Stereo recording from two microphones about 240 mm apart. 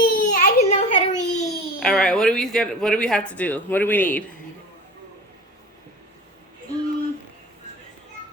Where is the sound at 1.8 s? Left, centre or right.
Centre.